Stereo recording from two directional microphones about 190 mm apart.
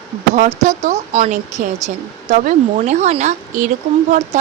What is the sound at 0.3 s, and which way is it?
Speech, 40° right (ahead or behind).